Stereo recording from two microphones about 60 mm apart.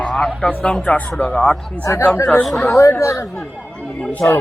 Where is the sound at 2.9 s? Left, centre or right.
Left.